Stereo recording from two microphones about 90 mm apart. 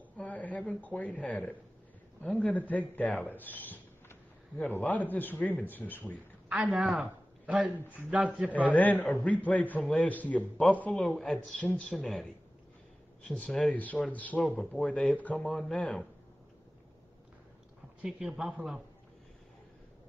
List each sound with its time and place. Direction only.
0.2 s a man's voice: 15° left (ahead or behind)
3.2 s a sound: 20° left (ahead or behind)
4.6 s a man's voice: 20° left (ahead or behind)
6.7 s speech: 5° right (ahead or behind)
8.7 s a man's voice: 20° left (ahead or behind)
11.0 s speech: 5° left (ahead or behind)
13.3 s a man's voice: 5° left (ahead or behind)
18.0 s speech: 10° right (ahead or behind)